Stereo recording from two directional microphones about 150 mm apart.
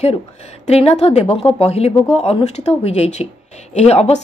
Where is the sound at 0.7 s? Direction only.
45° left (ahead or behind).